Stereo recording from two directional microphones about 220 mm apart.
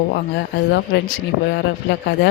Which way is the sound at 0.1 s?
50° left (ahead or behind).